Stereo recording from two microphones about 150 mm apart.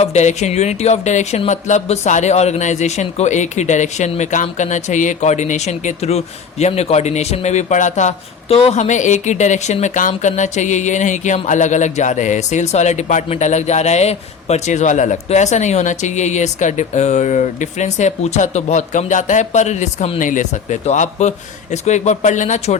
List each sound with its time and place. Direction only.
0.0 s speech: 50° left (ahead or behind)